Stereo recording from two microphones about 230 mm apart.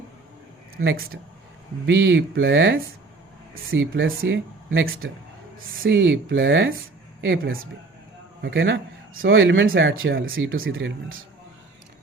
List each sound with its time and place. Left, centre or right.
0.8 s speech: right
1.9 s speech: right
4.0 s speech: right
4.7 s speech: right
8.4 s speech: right